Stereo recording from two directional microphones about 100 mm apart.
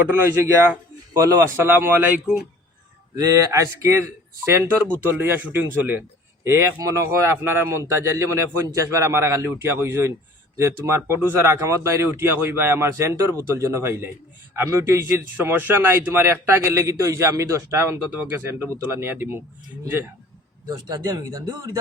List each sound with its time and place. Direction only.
1.1 s speech: 35° right (ahead or behind)
3.2 s speech: 30° right (ahead or behind)
20.7 s speech: 45° right (ahead or behind)